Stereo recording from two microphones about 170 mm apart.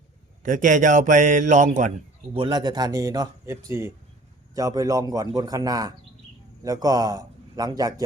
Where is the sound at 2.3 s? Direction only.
30° right (ahead or behind).